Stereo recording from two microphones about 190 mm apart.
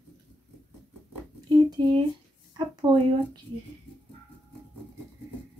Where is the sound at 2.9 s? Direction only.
25° right (ahead or behind).